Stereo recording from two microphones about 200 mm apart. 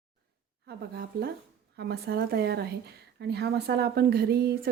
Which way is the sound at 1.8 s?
55° right (ahead or behind).